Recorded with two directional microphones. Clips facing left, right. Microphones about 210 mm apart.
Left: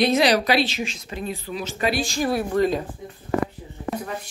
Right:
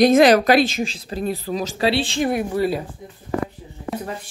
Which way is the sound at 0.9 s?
35° right (ahead or behind).